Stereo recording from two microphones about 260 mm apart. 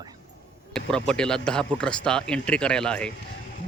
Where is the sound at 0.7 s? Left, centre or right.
Centre.